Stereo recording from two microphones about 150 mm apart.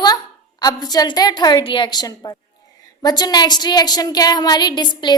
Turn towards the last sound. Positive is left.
turn(degrees=30)  # may be behind; listen again after turning